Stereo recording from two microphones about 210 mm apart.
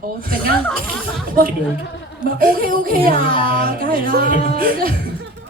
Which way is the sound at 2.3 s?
45° right (ahead or behind).